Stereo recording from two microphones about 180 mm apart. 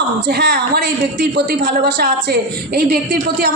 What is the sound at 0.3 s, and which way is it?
A woman's voice, 55° right (ahead or behind).